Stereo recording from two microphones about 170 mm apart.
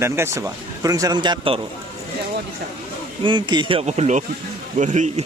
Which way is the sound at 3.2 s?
25° right (ahead or behind).